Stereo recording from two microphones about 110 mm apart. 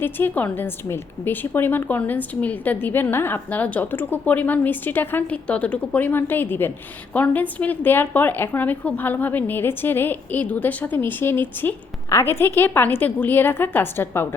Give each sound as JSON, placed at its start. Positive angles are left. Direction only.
{"t": 0.0, "sound": "a woman's voice", "side_deg": 15}